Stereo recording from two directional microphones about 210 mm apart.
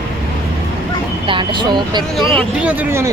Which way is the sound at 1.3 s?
20° right (ahead or behind).